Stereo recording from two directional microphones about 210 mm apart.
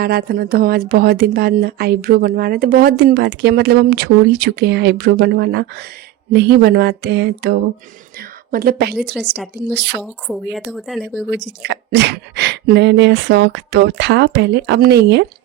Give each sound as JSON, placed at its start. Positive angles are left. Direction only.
{"t": 0.0, "sound": "a woman's voice", "side_deg": -45}
{"t": 10.0, "sound": "speech", "side_deg": 0}
{"t": 11.3, "sound": "speech", "side_deg": -55}